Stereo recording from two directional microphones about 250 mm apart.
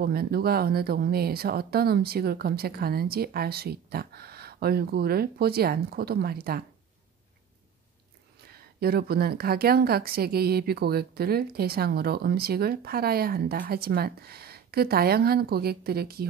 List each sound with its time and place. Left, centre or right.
0.0 s a woman's voice: right
8.5 s a woman's voice: right